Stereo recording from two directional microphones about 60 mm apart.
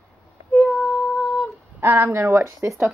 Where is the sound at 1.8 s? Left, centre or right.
Right.